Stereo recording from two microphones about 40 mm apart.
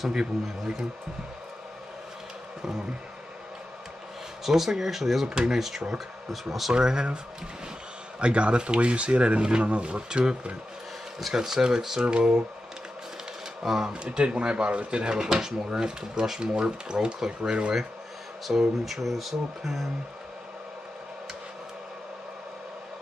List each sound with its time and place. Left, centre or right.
0.1 s speech: centre
4.5 s speech: centre
6.7 s speech: centre
8.2 s speech: right
9.4 s speech: right
11.1 s speech: centre
13.7 s speech: centre
14.0 s speech: right
18.5 s speech: centre